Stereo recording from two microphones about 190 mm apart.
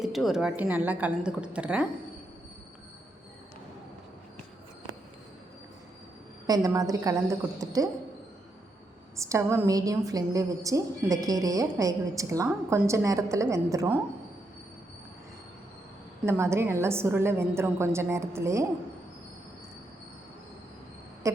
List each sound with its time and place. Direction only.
0.0 s a woman's voice: centre (ahead or behind)
6.5 s a woman's voice: 20° right (ahead or behind)
9.1 s a woman's voice: 15° right (ahead or behind)
16.2 s a woman's voice: 15° right (ahead or behind)
21.2 s a woman's voice: 15° right (ahead or behind)